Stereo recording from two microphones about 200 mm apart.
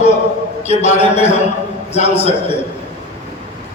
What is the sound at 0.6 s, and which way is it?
A man's voice, 35° left (ahead or behind).